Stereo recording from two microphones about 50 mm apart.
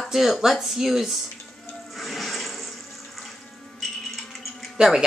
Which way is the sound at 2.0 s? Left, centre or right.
Centre.